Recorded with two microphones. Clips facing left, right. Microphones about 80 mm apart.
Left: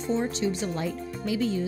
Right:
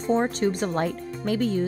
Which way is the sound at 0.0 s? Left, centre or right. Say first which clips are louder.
Right 4 dB; right.